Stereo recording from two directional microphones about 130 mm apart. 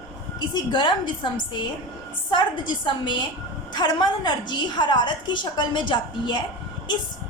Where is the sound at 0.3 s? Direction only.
35° left (ahead or behind).